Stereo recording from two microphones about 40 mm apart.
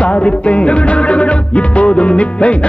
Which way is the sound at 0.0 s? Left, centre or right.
Left.